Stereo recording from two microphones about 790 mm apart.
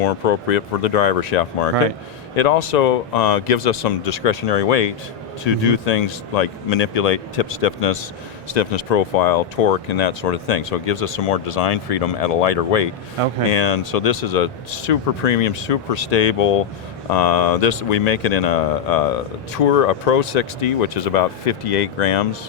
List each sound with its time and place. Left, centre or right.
0.0 s speech: left